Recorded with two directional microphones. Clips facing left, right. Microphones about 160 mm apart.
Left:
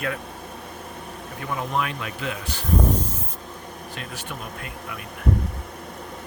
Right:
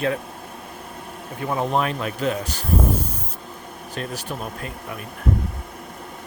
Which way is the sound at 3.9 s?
35° right (ahead or behind).